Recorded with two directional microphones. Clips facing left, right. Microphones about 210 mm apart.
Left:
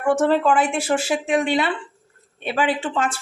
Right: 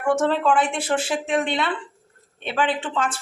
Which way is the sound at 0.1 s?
5° left (ahead or behind).